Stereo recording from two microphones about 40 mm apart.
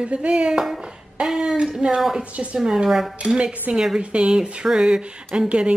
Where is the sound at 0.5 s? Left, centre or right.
Centre.